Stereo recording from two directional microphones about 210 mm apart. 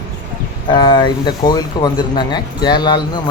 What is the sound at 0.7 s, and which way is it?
Speech, 20° left (ahead or behind).